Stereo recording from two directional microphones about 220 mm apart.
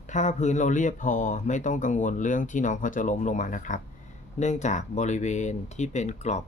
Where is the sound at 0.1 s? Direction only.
35° left (ahead or behind).